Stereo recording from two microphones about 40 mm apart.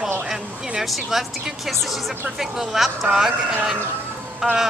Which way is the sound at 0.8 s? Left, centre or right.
Centre.